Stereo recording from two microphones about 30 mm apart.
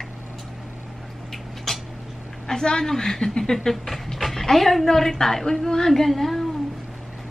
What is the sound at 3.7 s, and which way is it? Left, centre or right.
A woman's voice, centre.